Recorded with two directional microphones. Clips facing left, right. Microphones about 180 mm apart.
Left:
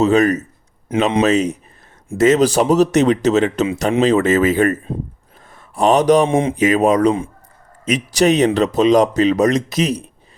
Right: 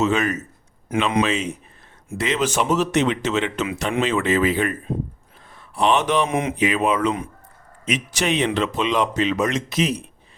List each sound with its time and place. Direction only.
0.0 s speech: 40° left (ahead or behind)
6.6 s speech: 40° left (ahead or behind)